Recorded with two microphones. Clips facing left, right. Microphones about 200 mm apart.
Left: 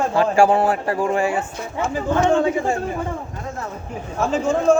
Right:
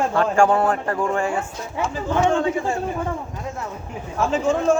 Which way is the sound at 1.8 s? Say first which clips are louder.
Left 1 dB; 45° left (ahead or behind).